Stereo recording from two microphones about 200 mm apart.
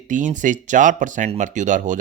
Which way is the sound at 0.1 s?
40° right (ahead or behind).